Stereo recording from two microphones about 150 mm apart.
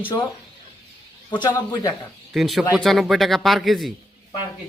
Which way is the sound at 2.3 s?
Centre (ahead or behind).